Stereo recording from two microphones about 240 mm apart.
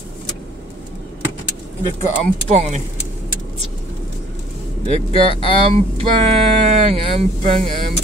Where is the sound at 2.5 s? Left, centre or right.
Right.